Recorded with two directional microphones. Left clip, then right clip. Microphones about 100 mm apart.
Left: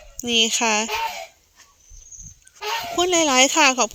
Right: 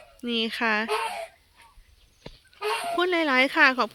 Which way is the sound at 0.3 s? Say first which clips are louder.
Left 7 dB; 25° left (ahead or behind).